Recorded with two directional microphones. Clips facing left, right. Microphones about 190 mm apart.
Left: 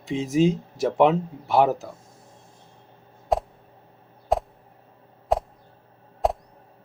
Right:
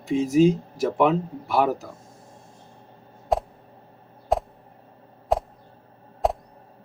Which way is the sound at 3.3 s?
Centre (ahead or behind).